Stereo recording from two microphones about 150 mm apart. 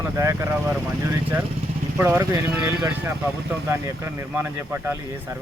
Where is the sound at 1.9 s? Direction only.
15° right (ahead or behind).